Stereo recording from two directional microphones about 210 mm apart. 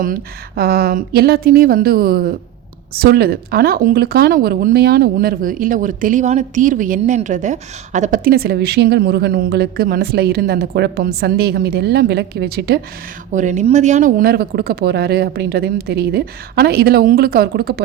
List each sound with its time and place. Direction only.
0.0 s a woman's voice: 45° right (ahead or behind)
13.3 s a woman's voice: 35° right (ahead or behind)